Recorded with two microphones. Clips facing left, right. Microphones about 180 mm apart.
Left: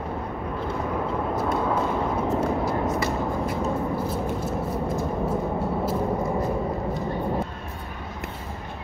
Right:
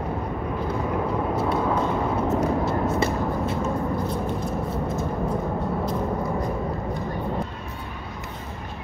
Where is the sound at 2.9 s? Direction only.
25° right (ahead or behind).